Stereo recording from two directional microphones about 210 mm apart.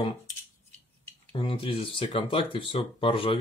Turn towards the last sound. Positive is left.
turn(degrees=25)  # may be behind; listen again after turning